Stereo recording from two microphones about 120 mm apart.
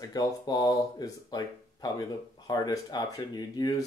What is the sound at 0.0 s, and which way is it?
Speech, 35° left (ahead or behind).